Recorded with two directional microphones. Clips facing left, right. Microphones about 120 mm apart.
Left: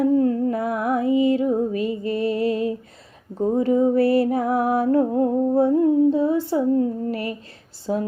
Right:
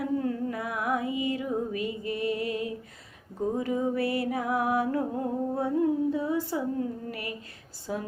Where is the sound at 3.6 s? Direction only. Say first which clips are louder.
Left 12 dB; 35° left (ahead or behind).